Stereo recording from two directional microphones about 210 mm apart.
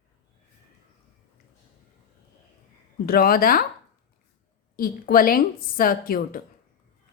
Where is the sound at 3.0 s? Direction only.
45° left (ahead or behind).